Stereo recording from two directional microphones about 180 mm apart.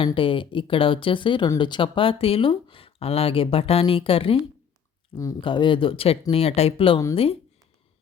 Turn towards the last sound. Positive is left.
turn(degrees=30)  # may be behind; listen again after turning